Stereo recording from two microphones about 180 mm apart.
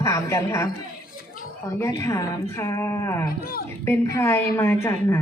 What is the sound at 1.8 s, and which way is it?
A woman's voice, 15° left (ahead or behind).